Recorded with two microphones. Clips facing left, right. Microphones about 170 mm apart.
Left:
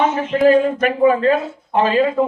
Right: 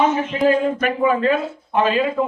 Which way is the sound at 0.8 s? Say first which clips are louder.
Left 4 dB; 35° left (ahead or behind).